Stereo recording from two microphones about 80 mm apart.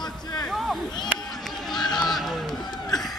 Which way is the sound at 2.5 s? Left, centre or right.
Left.